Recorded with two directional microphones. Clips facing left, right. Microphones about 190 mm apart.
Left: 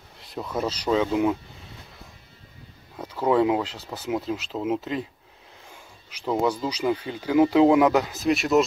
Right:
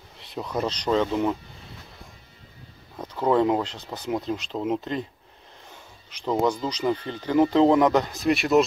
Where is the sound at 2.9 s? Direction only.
10° left (ahead or behind).